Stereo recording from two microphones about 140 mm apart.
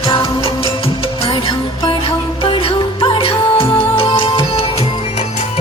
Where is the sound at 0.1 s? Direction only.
45° left (ahead or behind).